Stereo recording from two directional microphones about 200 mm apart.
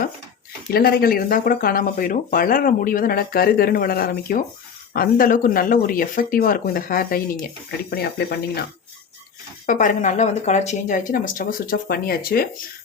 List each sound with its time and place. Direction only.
0.7 s speech: 50° left (ahead or behind)
9.6 s speech: 40° left (ahead or behind)